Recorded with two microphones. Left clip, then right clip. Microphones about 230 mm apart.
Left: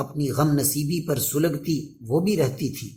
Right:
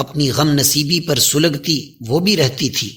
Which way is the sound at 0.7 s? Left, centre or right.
Right.